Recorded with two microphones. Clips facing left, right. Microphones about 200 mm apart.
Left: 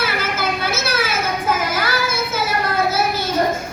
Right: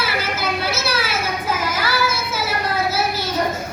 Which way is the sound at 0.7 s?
50° left (ahead or behind).